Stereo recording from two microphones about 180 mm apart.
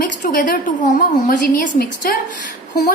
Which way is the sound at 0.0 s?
50° left (ahead or behind).